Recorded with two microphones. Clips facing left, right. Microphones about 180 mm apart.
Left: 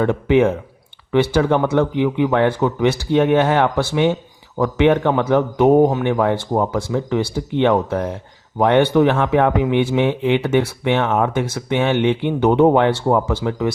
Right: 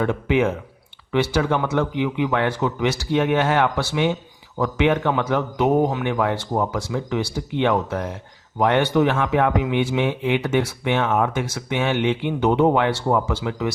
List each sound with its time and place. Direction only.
0.0 s a man's voice: 55° left (ahead or behind)